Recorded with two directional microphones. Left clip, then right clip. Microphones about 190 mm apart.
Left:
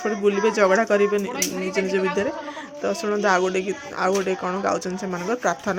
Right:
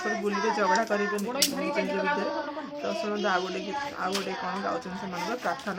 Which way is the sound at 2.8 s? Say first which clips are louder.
Left 8 dB; 45° left (ahead or behind).